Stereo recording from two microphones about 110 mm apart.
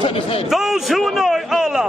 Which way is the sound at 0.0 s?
55° left (ahead or behind).